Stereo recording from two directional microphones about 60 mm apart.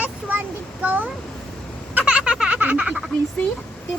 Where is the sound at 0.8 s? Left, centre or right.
Right.